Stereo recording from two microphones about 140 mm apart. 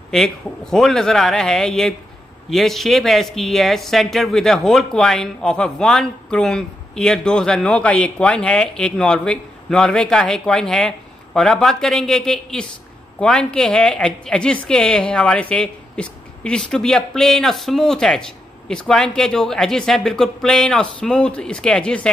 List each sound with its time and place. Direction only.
0.1 s speech: 5° left (ahead or behind)